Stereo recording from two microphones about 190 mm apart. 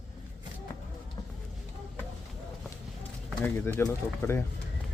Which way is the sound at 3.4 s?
15° left (ahead or behind).